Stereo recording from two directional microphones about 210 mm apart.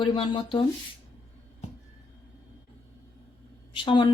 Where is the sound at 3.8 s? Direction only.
25° left (ahead or behind).